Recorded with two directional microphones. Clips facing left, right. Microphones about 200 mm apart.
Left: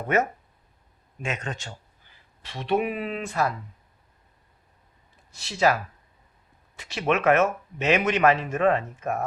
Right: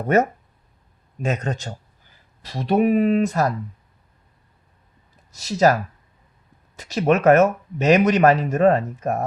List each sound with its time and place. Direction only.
0.1 s speech: 40° right (ahead or behind)
5.3 s speech: 40° right (ahead or behind)